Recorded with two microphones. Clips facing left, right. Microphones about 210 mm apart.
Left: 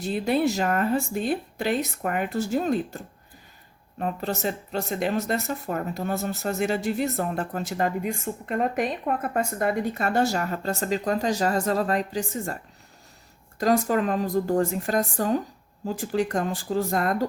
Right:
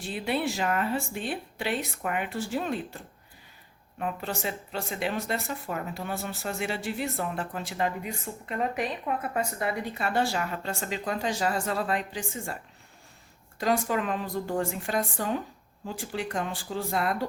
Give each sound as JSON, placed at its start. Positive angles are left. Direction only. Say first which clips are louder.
{"t": 0.0, "sound": "speech", "louder": "left 6 dB", "side_deg": 40}
{"t": 13.6, "sound": "a woman's voice", "louder": "left 5 dB", "side_deg": 40}